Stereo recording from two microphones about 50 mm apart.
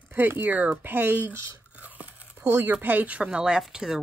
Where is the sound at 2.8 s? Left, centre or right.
Right.